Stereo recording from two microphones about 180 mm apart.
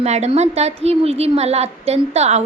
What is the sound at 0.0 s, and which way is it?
A woman's voice, 35° right (ahead or behind).